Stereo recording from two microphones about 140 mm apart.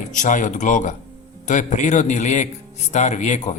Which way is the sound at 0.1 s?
65° left (ahead or behind).